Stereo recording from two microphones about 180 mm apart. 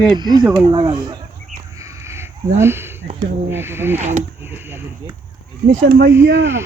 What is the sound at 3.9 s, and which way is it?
Speech, 40° right (ahead or behind).